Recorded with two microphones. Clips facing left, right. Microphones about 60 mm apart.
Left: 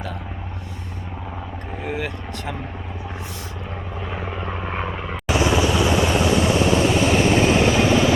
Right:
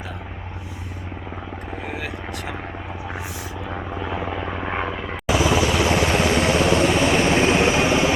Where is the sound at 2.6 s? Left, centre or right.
Right.